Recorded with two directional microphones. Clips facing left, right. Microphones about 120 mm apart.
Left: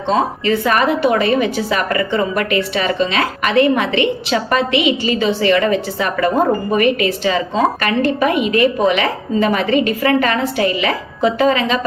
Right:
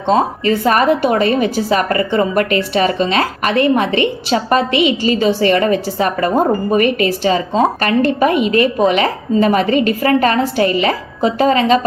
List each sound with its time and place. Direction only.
0.1 s a woman's voice: 40° right (ahead or behind)